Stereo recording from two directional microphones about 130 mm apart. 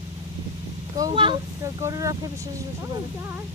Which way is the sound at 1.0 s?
25° right (ahead or behind).